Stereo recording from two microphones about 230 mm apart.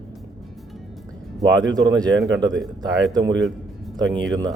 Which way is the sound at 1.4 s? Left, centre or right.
Centre.